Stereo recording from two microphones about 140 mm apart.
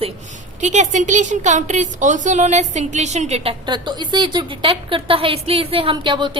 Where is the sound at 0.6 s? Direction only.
60° right (ahead or behind).